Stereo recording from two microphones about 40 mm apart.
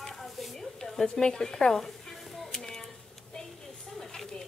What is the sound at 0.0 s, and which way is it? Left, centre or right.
Stir, centre.